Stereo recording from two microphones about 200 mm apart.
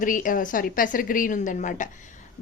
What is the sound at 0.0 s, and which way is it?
A woman's voice, 40° left (ahead or behind).